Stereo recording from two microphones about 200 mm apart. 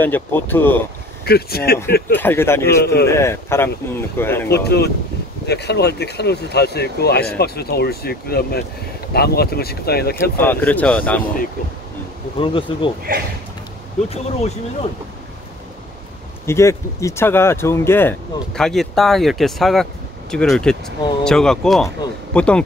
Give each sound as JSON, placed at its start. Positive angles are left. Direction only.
{"t": 0.0, "sound": "speech", "side_deg": 10}
{"t": 1.2, "sound": "speech", "side_deg": 50}
{"t": 2.1, "sound": "speech", "side_deg": 10}
{"t": 2.8, "sound": "speech", "side_deg": 55}
{"t": 3.1, "sound": "speech", "side_deg": 15}
{"t": 4.5, "sound": "speech", "side_deg": 55}
{"t": 10.3, "sound": "speech", "side_deg": 10}
{"t": 12.4, "sound": "bee", "side_deg": 25}
{"t": 14.0, "sound": "speech", "side_deg": 30}
{"t": 16.4, "sound": "speech", "side_deg": 15}